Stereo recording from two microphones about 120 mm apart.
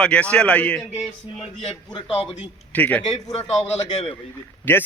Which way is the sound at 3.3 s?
60° left (ahead or behind).